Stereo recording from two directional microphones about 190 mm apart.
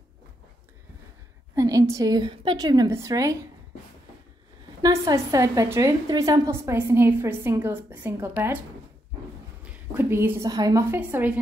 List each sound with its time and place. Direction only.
1.5 s a woman's voice: 20° right (ahead or behind)
4.8 s a woman's voice: 15° right (ahead or behind)
9.9 s a woman's voice: 10° right (ahead or behind)